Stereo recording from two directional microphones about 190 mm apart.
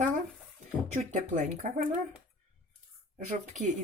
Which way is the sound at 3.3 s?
40° right (ahead or behind).